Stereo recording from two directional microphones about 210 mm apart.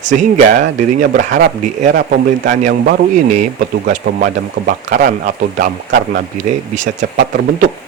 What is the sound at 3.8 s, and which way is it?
Speech, 40° right (ahead or behind).